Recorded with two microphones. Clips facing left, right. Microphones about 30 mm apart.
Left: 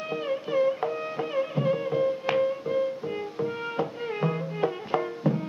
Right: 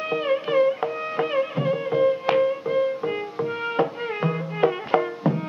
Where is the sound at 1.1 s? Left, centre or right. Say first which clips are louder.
Right 5 dB; right.